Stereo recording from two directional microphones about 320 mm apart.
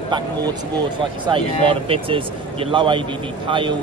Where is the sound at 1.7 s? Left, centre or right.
Centre.